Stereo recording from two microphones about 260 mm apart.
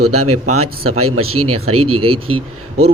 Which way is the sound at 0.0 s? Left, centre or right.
Right.